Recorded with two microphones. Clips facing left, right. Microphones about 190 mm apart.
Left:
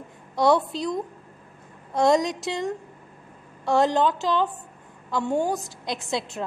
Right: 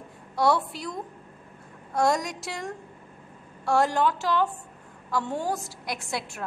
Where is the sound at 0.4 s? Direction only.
20° left (ahead or behind).